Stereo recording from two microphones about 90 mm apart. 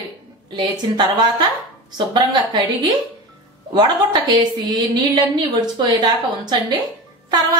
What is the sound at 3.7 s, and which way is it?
A woman's voice, 55° right (ahead or behind).